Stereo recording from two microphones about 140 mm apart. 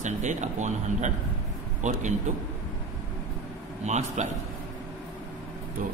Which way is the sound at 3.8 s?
55° right (ahead or behind).